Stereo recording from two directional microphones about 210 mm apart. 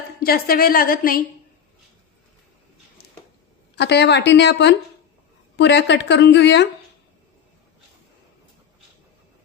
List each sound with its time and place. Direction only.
0.2 s a woman's voice: 45° left (ahead or behind)
3.8 s speech: 55° left (ahead or behind)